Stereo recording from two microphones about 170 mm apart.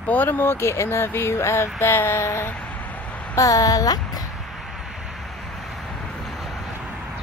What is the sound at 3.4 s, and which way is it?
Speech, 20° left (ahead or behind).